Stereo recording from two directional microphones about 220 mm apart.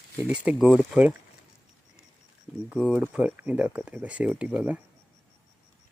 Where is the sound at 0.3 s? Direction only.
5° right (ahead or behind).